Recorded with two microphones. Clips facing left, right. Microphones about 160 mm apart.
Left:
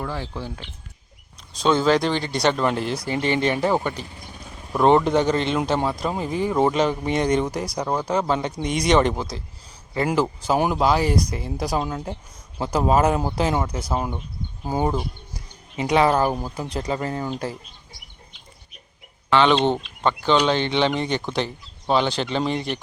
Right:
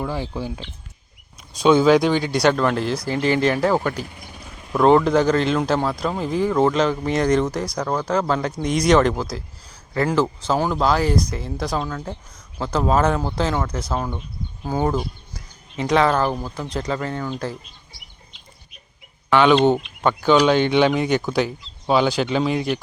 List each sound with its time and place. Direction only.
0.0 s speech: 15° right (ahead or behind)
3.7 s speech: 15° left (ahead or behind)
4.7 s speech: 5° left (ahead or behind)
6.5 s speech: 10° left (ahead or behind)
8.1 s speech: 5° left (ahead or behind)
9.9 s speech: 10° left (ahead or behind)
17.0 s speech: 30° left (ahead or behind)
19.3 s speech: 10° right (ahead or behind)